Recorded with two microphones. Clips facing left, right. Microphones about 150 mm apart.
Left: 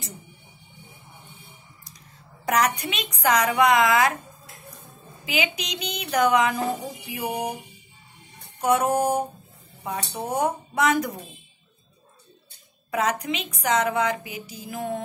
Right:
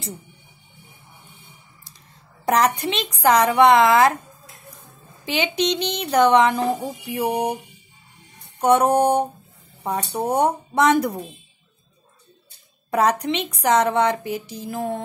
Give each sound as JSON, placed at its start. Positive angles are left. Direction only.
{"t": 2.4, "sound": "speech", "side_deg": -30}
{"t": 5.2, "sound": "speech", "side_deg": -30}
{"t": 8.5, "sound": "speech", "side_deg": -35}
{"t": 12.9, "sound": "speech", "side_deg": -35}